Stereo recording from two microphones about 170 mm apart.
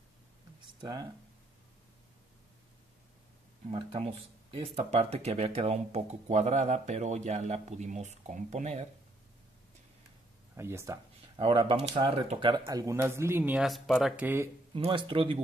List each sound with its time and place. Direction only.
0.7 s speech: 25° right (ahead or behind)
3.7 s speech: 35° right (ahead or behind)
10.5 s speech: 15° right (ahead or behind)
11.3 s speech: 30° right (ahead or behind)
12.6 s speech: 20° right (ahead or behind); by 14.2 s centre (ahead or behind)
14.2 s speech: 15° right (ahead or behind)
14.8 s speech: 30° right (ahead or behind)